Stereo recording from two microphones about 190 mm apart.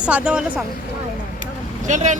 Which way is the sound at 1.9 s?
40° right (ahead or behind).